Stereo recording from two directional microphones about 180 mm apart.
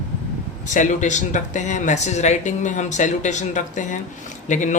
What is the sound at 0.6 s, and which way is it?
Speech, 45° left (ahead or behind).